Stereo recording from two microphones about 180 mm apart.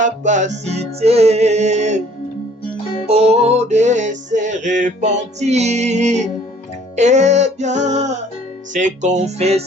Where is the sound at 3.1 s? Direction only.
35° right (ahead or behind).